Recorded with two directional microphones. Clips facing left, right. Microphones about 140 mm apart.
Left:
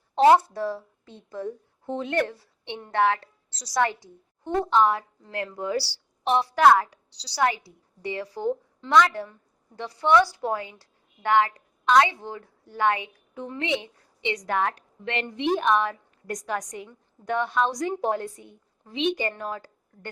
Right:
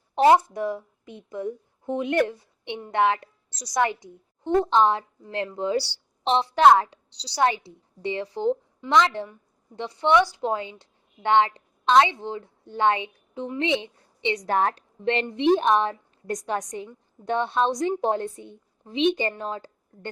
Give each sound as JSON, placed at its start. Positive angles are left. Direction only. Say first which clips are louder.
{"t": 0.2, "sound": "a woman's voice", "louder": "even", "side_deg": -15}